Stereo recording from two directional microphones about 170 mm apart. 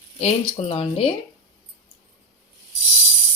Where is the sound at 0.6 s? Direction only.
35° left (ahead or behind).